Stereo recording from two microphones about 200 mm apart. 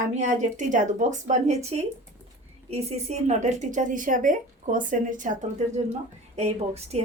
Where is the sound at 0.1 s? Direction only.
40° right (ahead or behind).